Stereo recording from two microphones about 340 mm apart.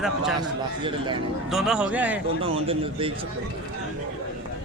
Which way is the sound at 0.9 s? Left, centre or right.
Centre.